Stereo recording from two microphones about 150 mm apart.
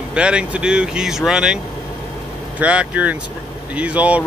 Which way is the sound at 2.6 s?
10° right (ahead or behind).